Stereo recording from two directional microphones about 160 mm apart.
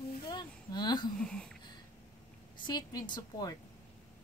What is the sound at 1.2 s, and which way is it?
Speech, 5° left (ahead or behind).